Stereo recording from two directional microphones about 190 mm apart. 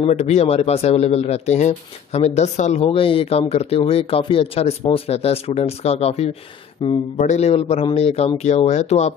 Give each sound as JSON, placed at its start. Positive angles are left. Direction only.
{"t": 0.0, "sound": "speech", "side_deg": 35}
{"t": 7.2, "sound": "speech", "side_deg": 35}